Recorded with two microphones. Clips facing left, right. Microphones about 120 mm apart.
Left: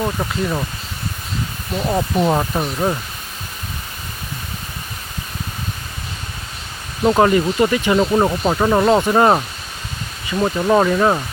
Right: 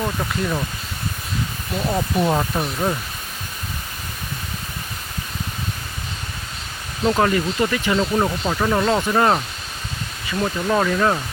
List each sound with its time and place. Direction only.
0.0 s speech: 15° left (ahead or behind)
1.7 s speech: 15° left (ahead or behind)
7.0 s speech: 25° left (ahead or behind)
10.4 s speech: 25° left (ahead or behind)